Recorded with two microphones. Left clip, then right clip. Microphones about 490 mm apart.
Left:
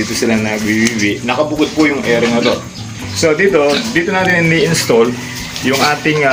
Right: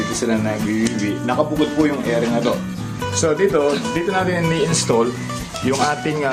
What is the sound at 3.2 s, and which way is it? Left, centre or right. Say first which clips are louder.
Speech: left 6 dB; right.